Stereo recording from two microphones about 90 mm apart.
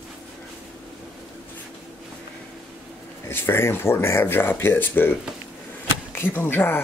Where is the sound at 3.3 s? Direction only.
25° left (ahead or behind).